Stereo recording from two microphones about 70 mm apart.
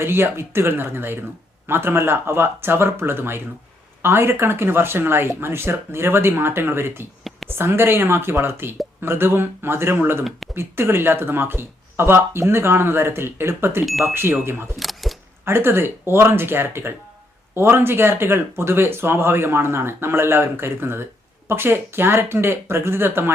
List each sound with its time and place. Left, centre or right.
0.0 s speech: right
7.3 s a sound: centre
7.5 s speech: right
14.8 s single-lens reflex camera: centre
15.4 s speech: right